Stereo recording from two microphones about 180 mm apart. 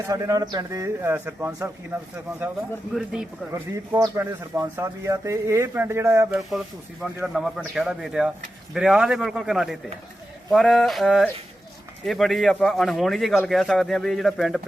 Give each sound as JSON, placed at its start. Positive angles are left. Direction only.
{"t": 0.1, "sound": "a man's voice", "side_deg": -20}
{"t": 3.5, "sound": "speech", "side_deg": -15}
{"t": 6.3, "sound": "a man's voice", "side_deg": 0}